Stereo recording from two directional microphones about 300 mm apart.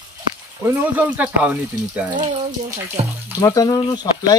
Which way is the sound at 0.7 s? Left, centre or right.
Centre.